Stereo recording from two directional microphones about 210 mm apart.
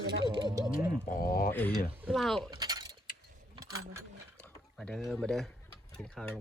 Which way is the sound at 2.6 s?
20° right (ahead or behind).